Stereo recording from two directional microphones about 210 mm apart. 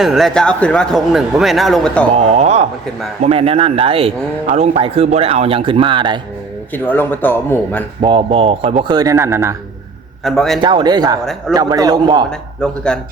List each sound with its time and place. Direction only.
0.0 s speech: centre (ahead or behind)
2.1 s a man's voice: 30° right (ahead or behind)
6.7 s speech: 10° left (ahead or behind)
8.0 s a man's voice: 25° right (ahead or behind)
10.2 s speech: centre (ahead or behind)
10.6 s a man's voice: 20° right (ahead or behind)
12.9 s speech: 5° left (ahead or behind)